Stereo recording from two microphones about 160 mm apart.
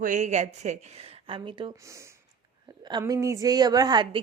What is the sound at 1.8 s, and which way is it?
A woman's voice, 20° right (ahead or behind).